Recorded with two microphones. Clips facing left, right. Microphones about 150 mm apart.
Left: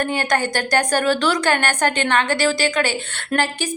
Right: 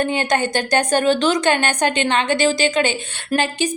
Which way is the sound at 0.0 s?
20° right (ahead or behind).